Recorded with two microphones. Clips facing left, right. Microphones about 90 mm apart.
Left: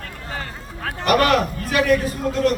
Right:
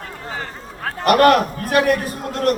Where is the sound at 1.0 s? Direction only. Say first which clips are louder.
Right 4 dB; 45° right (ahead or behind).